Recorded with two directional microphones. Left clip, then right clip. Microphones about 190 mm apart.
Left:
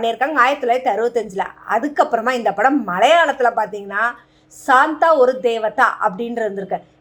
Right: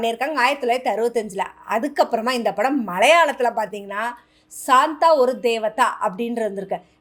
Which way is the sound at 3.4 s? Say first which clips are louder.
Left 5 dB; 60° right (ahead or behind).